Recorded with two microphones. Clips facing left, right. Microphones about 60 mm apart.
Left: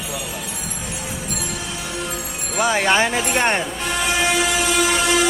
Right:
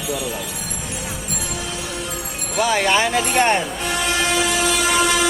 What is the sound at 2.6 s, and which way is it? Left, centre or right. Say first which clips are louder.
Speech: even; left.